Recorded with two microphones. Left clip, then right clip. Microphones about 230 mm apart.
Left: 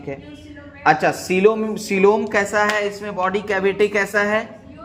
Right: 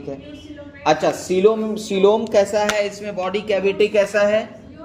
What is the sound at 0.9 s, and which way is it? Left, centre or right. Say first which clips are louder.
Speech: left 1 dB; left.